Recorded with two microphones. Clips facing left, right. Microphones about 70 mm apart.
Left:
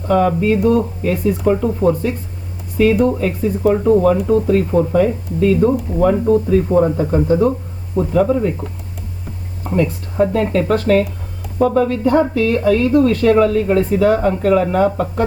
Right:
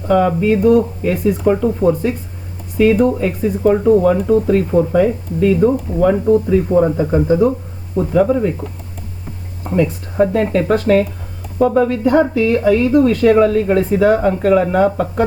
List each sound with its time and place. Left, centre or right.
0.1 s speech: centre
9.7 s speech: centre
14.2 s speech: centre